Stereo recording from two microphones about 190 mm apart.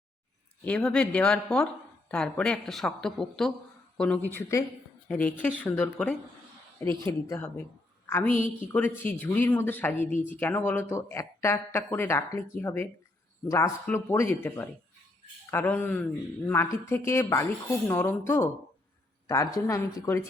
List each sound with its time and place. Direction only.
0.6 s a woman's voice: 5° left (ahead or behind)